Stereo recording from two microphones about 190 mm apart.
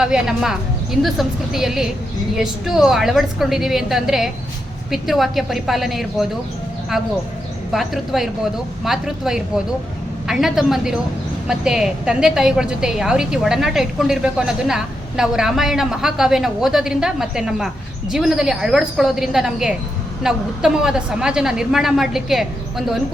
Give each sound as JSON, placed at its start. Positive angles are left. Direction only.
{"t": 0.0, "sound": "a woman's voice", "side_deg": -5}